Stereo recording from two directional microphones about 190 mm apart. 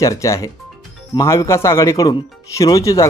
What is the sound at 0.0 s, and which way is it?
Speech, 15° left (ahead or behind).